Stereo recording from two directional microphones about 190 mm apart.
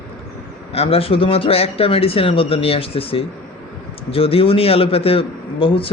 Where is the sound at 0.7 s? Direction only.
30° left (ahead or behind).